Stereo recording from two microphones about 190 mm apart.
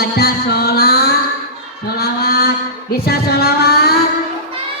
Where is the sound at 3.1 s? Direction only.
55° left (ahead or behind).